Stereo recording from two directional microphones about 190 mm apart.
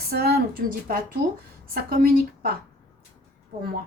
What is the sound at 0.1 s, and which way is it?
A woman's voice, 55° right (ahead or behind).